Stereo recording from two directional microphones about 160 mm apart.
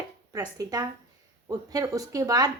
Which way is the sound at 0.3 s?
25° right (ahead or behind).